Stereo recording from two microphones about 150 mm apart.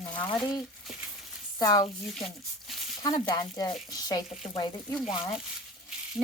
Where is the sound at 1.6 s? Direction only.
25° left (ahead or behind).